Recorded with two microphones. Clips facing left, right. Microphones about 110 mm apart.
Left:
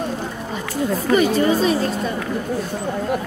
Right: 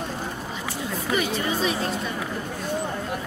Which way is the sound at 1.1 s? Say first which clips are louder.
Left 9 dB; 40° left (ahead or behind).